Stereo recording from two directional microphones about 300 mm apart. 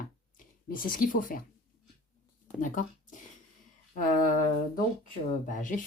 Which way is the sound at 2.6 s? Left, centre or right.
Left.